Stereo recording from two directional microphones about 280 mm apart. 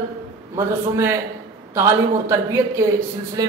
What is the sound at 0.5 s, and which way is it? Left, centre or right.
A man's voice, centre.